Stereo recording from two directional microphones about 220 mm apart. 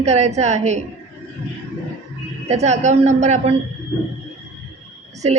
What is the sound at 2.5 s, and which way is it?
A woman's voice, 30° right (ahead or behind).